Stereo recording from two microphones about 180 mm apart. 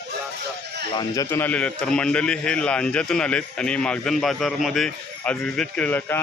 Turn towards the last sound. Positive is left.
turn(degrees=10)  # may be behind; listen again after turning